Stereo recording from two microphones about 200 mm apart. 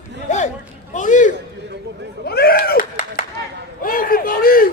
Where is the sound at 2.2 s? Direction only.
50° left (ahead or behind).